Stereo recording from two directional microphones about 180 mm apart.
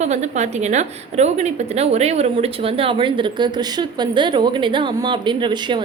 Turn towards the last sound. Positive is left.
turn(degrees=-25)  # may be behind; listen again after turning